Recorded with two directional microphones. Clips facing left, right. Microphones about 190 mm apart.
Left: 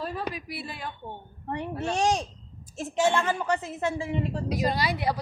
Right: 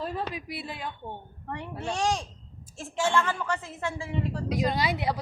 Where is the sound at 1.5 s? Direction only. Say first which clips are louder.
Left 4 dB; 20° left (ahead or behind).